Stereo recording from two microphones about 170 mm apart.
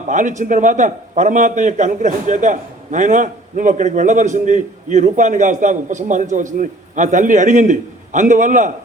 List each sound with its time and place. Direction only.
0.1 s a man's voice: 45° right (ahead or behind)